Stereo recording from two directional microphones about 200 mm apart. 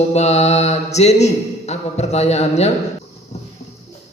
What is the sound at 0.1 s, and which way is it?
A woman's voice, 35° left (ahead or behind).